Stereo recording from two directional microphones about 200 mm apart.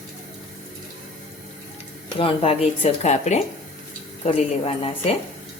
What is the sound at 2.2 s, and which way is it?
Speech, 30° left (ahead or behind).